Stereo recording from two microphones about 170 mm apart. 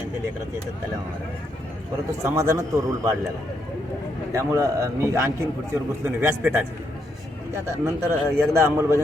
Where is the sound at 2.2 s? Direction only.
15° right (ahead or behind).